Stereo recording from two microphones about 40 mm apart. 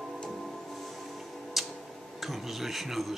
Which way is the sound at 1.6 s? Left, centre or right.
Centre.